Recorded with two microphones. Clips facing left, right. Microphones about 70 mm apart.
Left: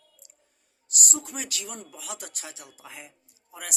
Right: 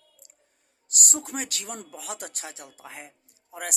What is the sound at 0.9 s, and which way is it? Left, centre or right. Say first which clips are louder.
A woman's voice: right 1 dB; right.